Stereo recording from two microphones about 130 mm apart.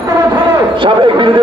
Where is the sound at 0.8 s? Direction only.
40° right (ahead or behind).